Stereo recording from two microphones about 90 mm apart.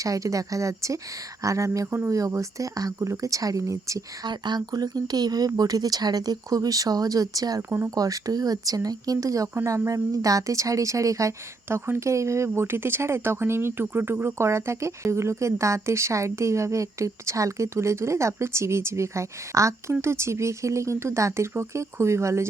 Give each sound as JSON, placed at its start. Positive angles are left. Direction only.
{"t": 0.0, "sound": "a woman's voice", "side_deg": -35}
{"t": 4.3, "sound": "a woman's voice", "side_deg": -55}